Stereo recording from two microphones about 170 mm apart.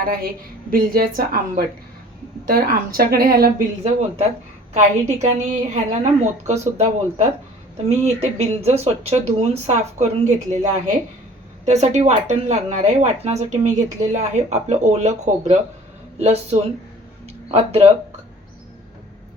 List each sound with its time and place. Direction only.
0.0 s speech: 60° right (ahead or behind)
4.7 s a woman's voice: 40° right (ahead or behind)
17.2 s a sound: 35° right (ahead or behind)